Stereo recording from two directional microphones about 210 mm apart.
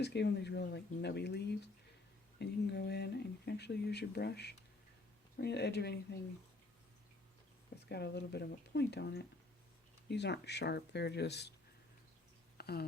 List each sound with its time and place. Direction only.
0.0 s speech: 55° left (ahead or behind)
7.9 s speech: 50° left (ahead or behind)
12.5 s a sound: 50° left (ahead or behind)